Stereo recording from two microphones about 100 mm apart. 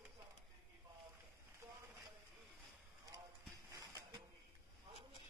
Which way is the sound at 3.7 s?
35° right (ahead or behind).